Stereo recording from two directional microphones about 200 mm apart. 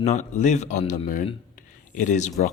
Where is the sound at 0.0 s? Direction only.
35° left (ahead or behind).